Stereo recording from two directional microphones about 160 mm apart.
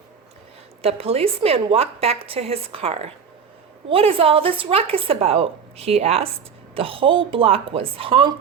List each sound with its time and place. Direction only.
0.8 s a woman's voice: 40° right (ahead or behind)